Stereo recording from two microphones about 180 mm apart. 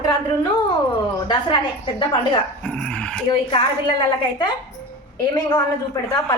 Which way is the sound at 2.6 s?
5° left (ahead or behind).